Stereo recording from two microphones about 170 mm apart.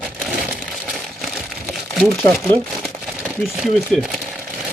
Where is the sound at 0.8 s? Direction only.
Centre (ahead or behind).